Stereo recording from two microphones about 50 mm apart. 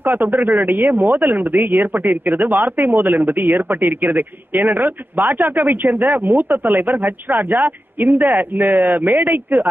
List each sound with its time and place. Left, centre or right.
0.0 s speech: right